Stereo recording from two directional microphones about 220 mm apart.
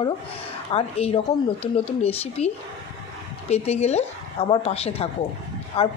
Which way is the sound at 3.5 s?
30° left (ahead or behind).